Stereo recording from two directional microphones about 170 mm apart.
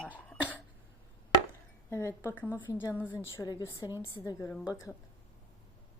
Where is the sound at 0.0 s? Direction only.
10° left (ahead or behind).